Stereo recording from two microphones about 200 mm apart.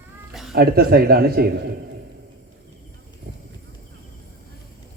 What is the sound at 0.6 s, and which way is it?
A man's voice, 50° right (ahead or behind).